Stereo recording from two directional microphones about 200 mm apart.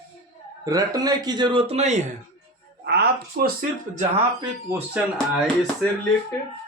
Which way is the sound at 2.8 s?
55° right (ahead or behind).